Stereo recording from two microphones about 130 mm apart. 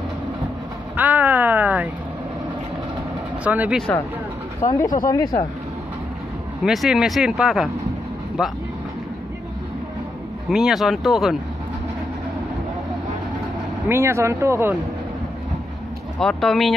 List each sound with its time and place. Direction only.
0.9 s a sound: 10° right (ahead or behind)
3.4 s speech: 10° right (ahead or behind)
4.6 s speech: 25° left (ahead or behind)
6.6 s speech: 5° right (ahead or behind)
10.5 s speech: 5° right (ahead or behind)
13.8 s speech: 20° right (ahead or behind)
16.2 s speech: 5° left (ahead or behind)